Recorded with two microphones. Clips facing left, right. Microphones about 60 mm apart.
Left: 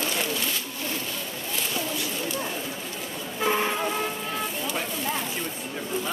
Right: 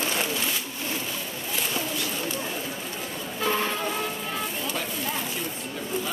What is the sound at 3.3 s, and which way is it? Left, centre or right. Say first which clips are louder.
Vehicle: left 2 dB; centre.